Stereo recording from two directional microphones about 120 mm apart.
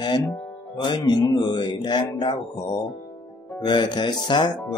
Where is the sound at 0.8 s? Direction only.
40° left (ahead or behind).